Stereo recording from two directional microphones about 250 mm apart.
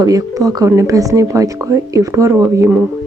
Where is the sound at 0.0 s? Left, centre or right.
Centre.